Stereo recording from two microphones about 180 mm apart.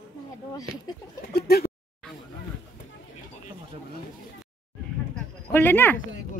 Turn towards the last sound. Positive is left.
turn(degrees=10)  # may be behind; listen again after turning